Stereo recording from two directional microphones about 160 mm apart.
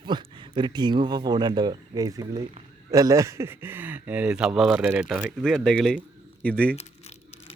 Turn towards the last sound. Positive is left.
turn(degrees=40)  # may be behind; listen again after turning